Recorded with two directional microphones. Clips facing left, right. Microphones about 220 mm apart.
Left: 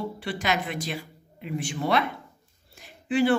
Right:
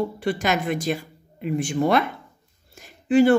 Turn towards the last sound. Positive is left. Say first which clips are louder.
# right 6 dB
turn(degrees=-45)  # may be behind; listen again after turning